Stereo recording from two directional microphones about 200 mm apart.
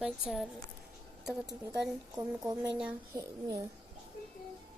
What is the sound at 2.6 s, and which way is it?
Speech, 5° right (ahead or behind).